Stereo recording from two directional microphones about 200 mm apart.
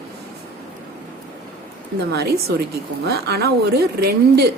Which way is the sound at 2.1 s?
50° right (ahead or behind).